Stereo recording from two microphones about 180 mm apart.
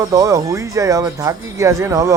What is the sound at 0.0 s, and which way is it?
Speech, 20° right (ahead or behind).